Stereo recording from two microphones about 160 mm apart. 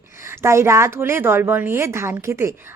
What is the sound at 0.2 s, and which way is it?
A woman's voice, 15° right (ahead or behind).